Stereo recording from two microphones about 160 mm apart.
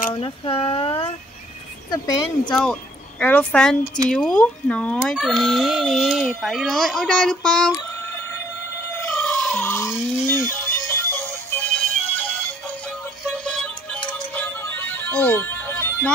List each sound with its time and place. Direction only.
0.1 s speech: 35° left (ahead or behind)
2.5 s speech: 5° left (ahead or behind)
9.1 s chicken: 5° left (ahead or behind)
10.3 s music: 15° left (ahead or behind)
13.4 s music: 5° left (ahead or behind)